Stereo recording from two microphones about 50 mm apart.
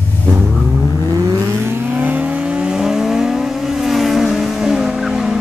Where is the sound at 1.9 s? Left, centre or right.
Right.